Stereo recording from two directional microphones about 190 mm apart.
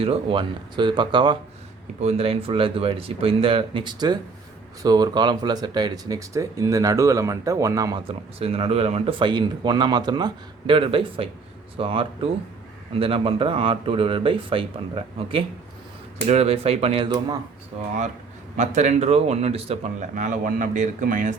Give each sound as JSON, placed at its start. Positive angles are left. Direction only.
{"t": 0.0, "sound": "speech", "side_deg": -30}
{"t": 18.5, "sound": "speech", "side_deg": -40}